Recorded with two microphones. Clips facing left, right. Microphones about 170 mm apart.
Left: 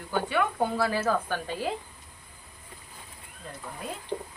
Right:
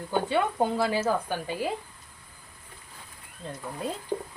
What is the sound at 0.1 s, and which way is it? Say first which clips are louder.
A woman's voice: right 1 dB; 25° right (ahead or behind).